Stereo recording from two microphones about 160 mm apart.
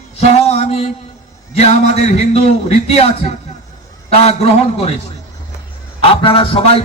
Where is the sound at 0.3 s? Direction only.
40° left (ahead or behind).